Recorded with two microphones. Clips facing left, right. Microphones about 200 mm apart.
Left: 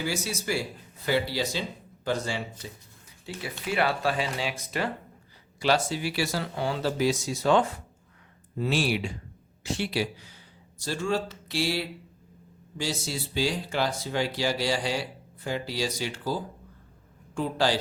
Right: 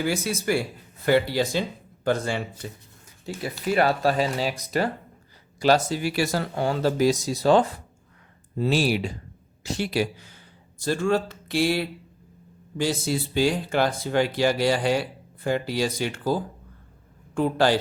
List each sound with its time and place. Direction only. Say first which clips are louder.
0.0 s speech: right 5 dB; 55° right (ahead or behind)
3.3 s speech: right 6 dB; 45° right (ahead or behind)